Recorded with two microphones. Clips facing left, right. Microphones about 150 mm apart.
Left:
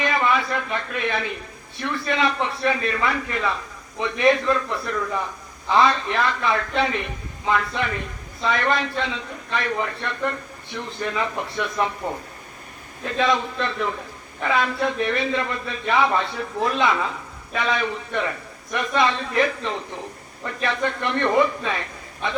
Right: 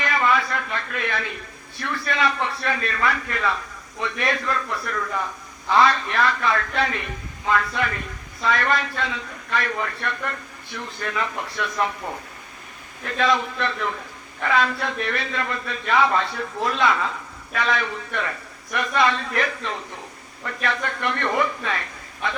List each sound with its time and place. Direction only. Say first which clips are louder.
0.0 s a man's voice: even; 20° left (ahead or behind)
13.1 s a man's voice: even; 20° left (ahead or behind)